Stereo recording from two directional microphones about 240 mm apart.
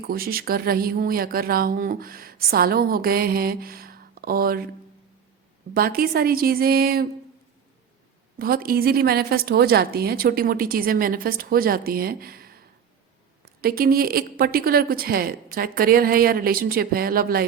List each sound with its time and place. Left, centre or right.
0.0 s speech: right
5.7 s speech: right
8.4 s speech: right